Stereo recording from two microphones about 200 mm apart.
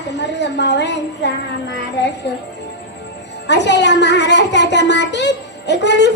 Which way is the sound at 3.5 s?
60° left (ahead or behind).